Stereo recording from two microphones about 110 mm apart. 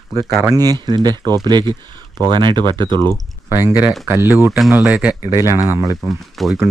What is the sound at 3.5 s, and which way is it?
Speech, 30° right (ahead or behind).